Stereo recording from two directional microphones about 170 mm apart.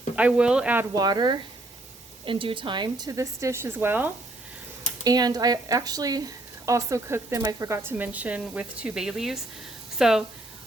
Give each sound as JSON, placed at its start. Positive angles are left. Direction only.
{"t": 0.2, "sound": "speech", "side_deg": -5}
{"t": 0.9, "sound": "speech", "side_deg": -25}
{"t": 5.0, "sound": "speech", "side_deg": -25}